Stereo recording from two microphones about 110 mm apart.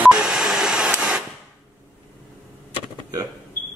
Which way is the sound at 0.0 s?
5° right (ahead or behind).